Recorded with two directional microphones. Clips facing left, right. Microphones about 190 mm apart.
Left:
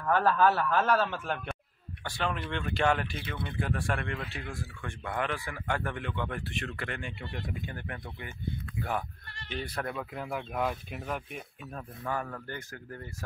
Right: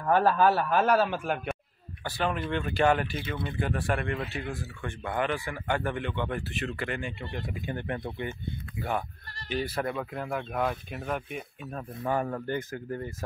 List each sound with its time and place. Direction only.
0.0 s a man's voice: 15° right (ahead or behind)
7.6 s speech: 25° right (ahead or behind)
9.5 s speech: 5° right (ahead or behind)
12.0 s speech: 25° right (ahead or behind)